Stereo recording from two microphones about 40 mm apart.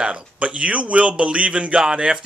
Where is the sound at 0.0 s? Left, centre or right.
Right.